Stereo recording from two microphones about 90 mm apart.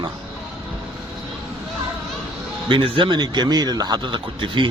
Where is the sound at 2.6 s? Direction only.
70° right (ahead or behind).